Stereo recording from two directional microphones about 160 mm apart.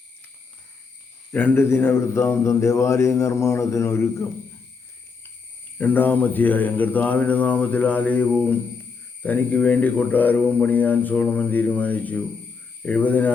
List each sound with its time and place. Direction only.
1.3 s speech: 10° left (ahead or behind)
5.7 s speech: 10° left (ahead or behind)